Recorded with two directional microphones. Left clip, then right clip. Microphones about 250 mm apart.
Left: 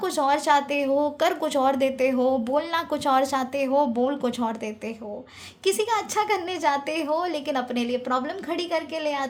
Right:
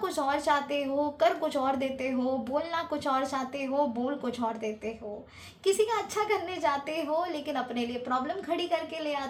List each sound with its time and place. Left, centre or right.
0.0 s a woman's voice: left